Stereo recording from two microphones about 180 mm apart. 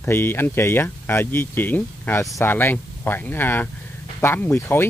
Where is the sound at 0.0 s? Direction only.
10° left (ahead or behind).